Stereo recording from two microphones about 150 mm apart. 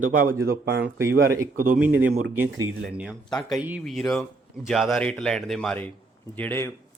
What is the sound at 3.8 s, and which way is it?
A man's voice, 5° left (ahead or behind).